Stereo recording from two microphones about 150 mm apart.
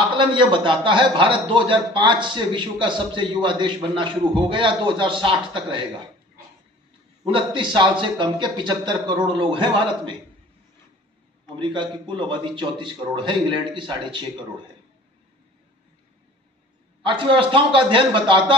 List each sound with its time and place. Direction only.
0.0 s a man's voice: 30° right (ahead or behind)
7.3 s a man's voice: 30° right (ahead or behind)
11.4 s a man's voice: 30° right (ahead or behind)
17.0 s a man's voice: 35° right (ahead or behind)